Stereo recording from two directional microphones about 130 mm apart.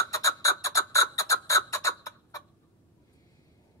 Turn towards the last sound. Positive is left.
turn(degrees=25)  # may be behind; listen again after turning